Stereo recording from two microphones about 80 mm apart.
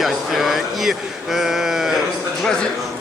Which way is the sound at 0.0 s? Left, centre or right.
Centre.